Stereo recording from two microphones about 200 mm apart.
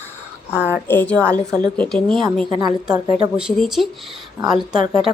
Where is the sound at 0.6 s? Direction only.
10° left (ahead or behind).